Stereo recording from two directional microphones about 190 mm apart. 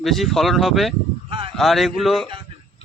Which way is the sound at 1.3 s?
30° right (ahead or behind).